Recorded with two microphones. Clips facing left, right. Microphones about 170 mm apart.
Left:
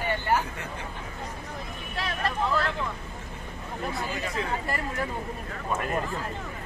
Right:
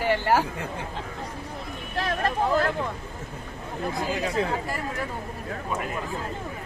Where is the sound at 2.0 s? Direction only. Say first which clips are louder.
Right 4 dB; 45° right (ahead or behind).